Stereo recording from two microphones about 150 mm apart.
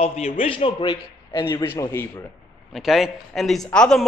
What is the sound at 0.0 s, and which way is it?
A man's voice, 40° left (ahead or behind).